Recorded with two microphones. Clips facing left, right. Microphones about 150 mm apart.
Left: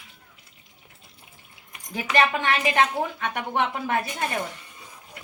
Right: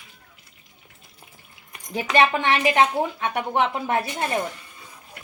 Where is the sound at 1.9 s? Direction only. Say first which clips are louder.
Right 3 dB; 25° right (ahead or behind).